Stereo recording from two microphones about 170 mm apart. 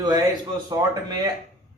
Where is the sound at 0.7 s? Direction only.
20° right (ahead or behind).